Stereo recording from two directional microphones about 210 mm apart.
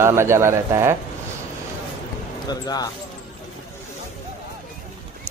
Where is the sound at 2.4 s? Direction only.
20° left (ahead or behind).